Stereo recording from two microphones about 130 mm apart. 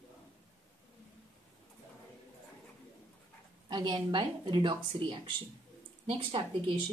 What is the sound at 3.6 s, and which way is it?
Speech, 35° right (ahead or behind).